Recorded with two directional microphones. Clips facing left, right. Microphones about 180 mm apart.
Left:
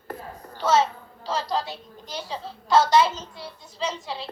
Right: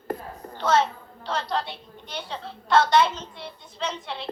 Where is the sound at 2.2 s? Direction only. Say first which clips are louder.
Left 1 dB; 5° left (ahead or behind).